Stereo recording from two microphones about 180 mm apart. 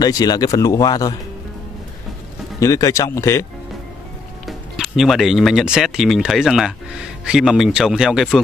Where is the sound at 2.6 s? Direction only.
20° left (ahead or behind).